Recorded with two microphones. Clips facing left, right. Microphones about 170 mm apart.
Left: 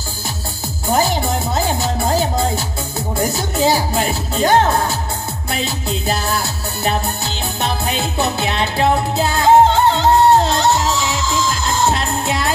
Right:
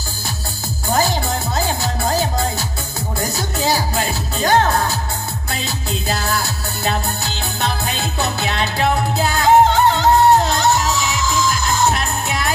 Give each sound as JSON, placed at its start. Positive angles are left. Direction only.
{"t": 0.9, "sound": "music", "side_deg": 20}
{"t": 6.0, "sound": "music", "side_deg": 20}